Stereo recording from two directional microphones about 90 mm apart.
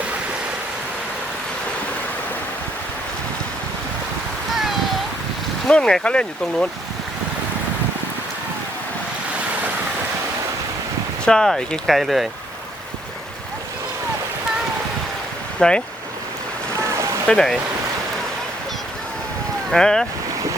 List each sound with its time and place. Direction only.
5.6 s speech: 10° left (ahead or behind)
11.3 s speech: 5° left (ahead or behind)
15.6 s speech: 10° left (ahead or behind)
16.7 s boat: 35° right (ahead or behind)
17.2 s speech: 5° left (ahead or behind)
19.7 s speech: 5° left (ahead or behind)